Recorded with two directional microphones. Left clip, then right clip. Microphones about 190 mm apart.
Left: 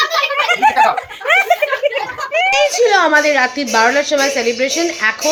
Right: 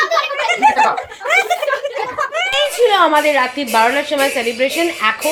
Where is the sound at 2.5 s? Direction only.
15° left (ahead or behind).